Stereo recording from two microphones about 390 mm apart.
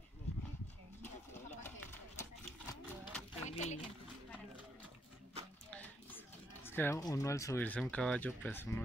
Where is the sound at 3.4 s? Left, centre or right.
Centre.